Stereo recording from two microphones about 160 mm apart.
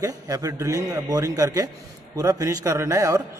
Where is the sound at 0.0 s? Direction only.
20° right (ahead or behind).